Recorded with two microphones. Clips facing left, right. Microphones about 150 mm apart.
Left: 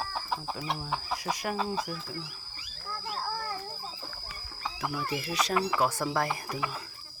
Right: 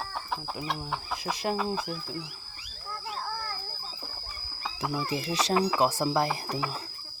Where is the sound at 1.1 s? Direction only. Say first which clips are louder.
Right 3 dB; 25° right (ahead or behind).